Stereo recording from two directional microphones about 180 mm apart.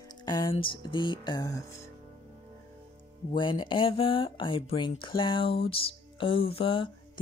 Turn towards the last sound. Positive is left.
turn(degrees=30)  # may be behind; listen again after turning